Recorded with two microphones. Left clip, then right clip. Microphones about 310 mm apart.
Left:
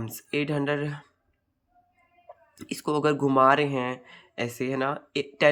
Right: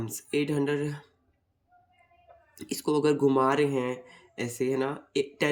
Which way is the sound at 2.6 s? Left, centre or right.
Centre.